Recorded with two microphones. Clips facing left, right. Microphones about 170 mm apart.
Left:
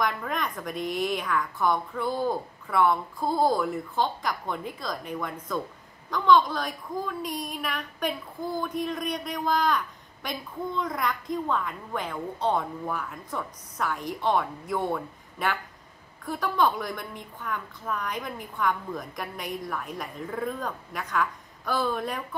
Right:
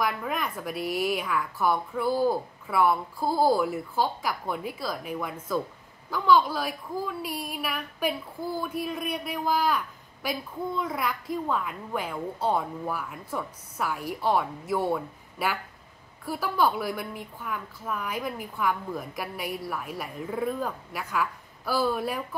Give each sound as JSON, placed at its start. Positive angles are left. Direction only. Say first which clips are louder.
{"t": 0.0, "sound": "a woman's voice", "louder": "even", "side_deg": -5}